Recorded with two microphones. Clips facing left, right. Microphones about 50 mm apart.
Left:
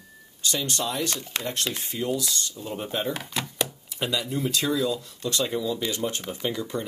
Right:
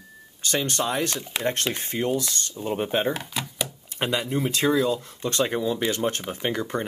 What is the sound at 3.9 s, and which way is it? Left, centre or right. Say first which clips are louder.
Speech: right 3 dB; right.